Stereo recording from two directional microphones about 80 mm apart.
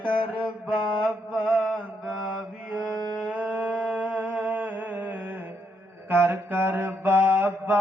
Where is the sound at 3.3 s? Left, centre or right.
Centre.